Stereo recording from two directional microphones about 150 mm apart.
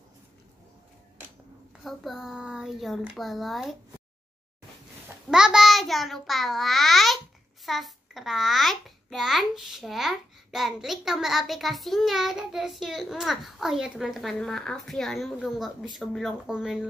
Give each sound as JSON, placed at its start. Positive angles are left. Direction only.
{"t": 1.9, "sound": "a child's voice", "side_deg": 0}
{"t": 5.3, "sound": "a child's voice", "side_deg": -5}